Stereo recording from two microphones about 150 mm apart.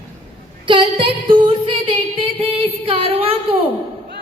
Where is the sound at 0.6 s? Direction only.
35° right (ahead or behind).